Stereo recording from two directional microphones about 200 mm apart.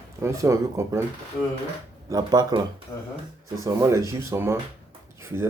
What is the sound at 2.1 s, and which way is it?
Speech, 20° right (ahead or behind).